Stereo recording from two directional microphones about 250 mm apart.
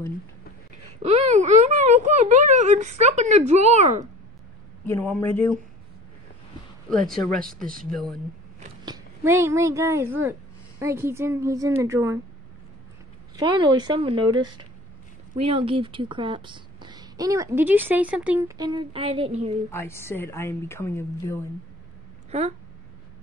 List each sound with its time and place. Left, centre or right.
1.0 s speech: right
4.8 s a woman's voice: centre
7.1 s speech: centre
8.8 s a woman's voice: centre
13.4 s a woman's voice: centre
19.7 s a woman's voice: centre
22.3 s speech: right